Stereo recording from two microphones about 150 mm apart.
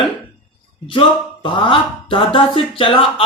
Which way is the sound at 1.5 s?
35° left (ahead or behind).